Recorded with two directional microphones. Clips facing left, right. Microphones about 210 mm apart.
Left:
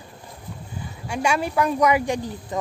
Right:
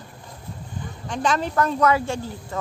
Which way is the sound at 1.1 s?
10° left (ahead or behind).